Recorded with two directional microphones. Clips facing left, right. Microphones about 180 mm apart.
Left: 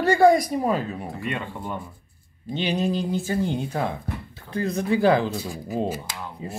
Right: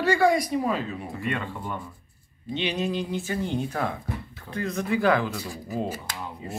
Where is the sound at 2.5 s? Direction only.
40° left (ahead or behind).